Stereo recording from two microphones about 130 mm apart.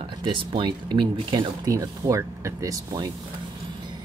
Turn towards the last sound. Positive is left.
turn(degrees=-30)  # may be behind; listen again after turning